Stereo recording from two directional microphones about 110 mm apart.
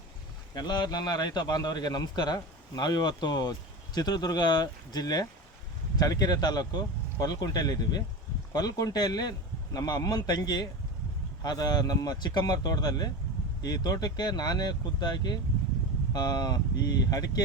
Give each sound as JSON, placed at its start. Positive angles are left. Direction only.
{"t": 0.5, "sound": "a man's voice", "side_deg": 40}